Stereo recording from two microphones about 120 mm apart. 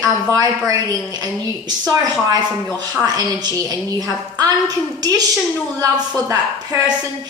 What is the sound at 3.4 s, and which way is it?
A woman's voice, 30° right (ahead or behind).